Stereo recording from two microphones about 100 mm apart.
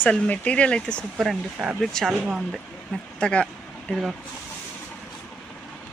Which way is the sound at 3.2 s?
10° left (ahead or behind).